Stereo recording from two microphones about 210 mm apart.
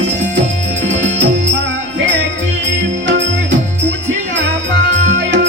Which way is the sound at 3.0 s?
60° right (ahead or behind).